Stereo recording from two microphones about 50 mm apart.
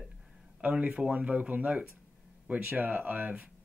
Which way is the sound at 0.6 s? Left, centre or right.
Right.